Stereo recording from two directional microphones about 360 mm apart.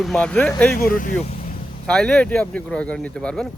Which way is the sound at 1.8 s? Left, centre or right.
Centre.